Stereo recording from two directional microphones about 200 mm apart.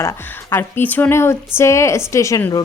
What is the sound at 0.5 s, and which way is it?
A woman's voice, 10° left (ahead or behind).